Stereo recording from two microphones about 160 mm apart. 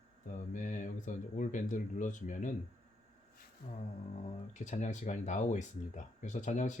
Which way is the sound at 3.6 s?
50° left (ahead or behind).